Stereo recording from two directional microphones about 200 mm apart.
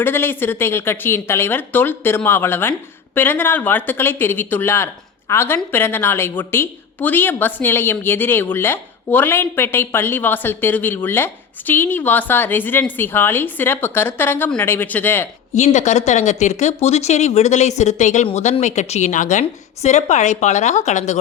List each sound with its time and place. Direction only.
0.0 s a woman's voice: 10° left (ahead or behind)
15.5 s speech: 35° left (ahead or behind)